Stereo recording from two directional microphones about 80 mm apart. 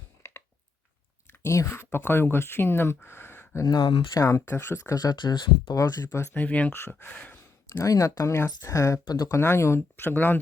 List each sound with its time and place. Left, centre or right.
1.3 s speech: left
3.7 s speech: left
4.1 s speech: left
4.9 s speech: left
5.6 s speech: left
6.1 s speech: left
6.3 s speech: centre
7.7 s speech: left
9.0 s speech: left
9.3 s speech: left